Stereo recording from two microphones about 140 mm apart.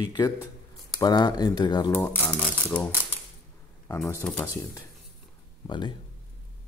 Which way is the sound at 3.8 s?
20° left (ahead or behind).